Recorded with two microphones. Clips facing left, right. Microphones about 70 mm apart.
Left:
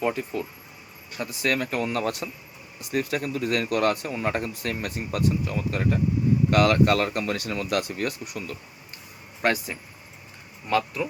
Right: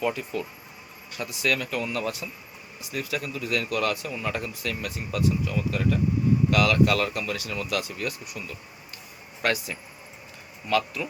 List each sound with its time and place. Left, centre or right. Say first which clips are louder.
0.0 s speech: left 1 dB; left
9.4 s speech: left 2 dB; left